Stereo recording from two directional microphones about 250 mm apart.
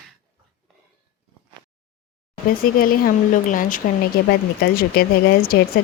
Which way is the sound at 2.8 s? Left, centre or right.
Left.